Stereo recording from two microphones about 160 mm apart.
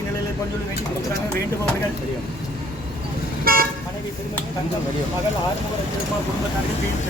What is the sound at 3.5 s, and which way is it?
Speech, 65° right (ahead or behind).